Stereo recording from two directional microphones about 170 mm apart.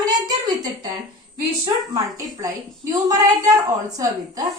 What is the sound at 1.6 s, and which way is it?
A woman's voice, 20° right (ahead or behind).